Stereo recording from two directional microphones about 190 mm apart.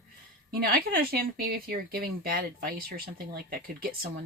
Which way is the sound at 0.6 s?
50° right (ahead or behind).